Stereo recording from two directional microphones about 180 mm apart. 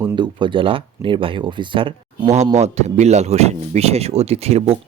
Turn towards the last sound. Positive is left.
turn(degrees=-35)  # may be behind; listen again after turning